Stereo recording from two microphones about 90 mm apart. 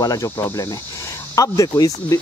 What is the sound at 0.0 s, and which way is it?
Speech, 40° left (ahead or behind).